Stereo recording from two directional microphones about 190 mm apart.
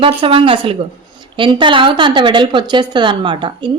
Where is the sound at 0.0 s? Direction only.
25° right (ahead or behind).